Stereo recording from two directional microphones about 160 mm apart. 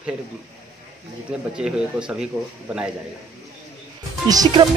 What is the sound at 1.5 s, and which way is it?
Speech, 5° right (ahead or behind).